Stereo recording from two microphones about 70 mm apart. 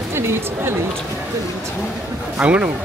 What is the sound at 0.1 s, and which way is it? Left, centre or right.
Speech, right.